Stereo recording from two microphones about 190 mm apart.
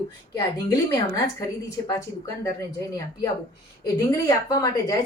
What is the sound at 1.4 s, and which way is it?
A woman's voice, 15° left (ahead or behind).